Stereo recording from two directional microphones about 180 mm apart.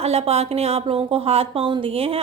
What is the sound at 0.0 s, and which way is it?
A woman's voice, 35° right (ahead or behind).